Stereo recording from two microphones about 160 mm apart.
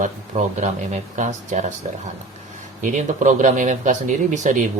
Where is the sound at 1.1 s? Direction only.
50° right (ahead or behind).